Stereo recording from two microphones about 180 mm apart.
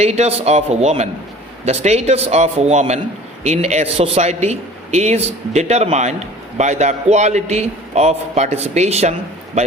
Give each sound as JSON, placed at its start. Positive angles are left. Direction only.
{"t": 0.0, "sound": "a man's voice", "side_deg": -35}